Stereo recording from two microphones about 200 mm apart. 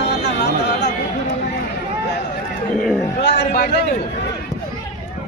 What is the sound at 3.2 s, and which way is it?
Speech, 60° left (ahead or behind).